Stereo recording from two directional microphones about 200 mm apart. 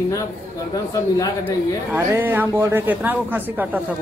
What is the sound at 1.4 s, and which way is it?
Speech, 10° right (ahead or behind).